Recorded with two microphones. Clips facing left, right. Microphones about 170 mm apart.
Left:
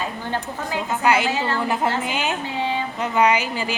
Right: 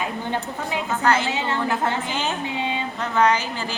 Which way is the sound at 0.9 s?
10° left (ahead or behind).